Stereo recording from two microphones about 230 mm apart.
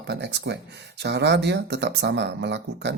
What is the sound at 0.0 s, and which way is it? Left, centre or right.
Speech, right.